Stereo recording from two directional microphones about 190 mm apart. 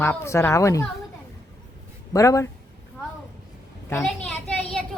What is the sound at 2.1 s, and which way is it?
Speech, 15° left (ahead or behind).